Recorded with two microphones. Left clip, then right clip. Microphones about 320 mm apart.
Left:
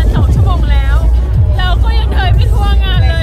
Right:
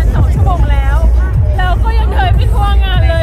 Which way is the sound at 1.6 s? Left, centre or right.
Centre.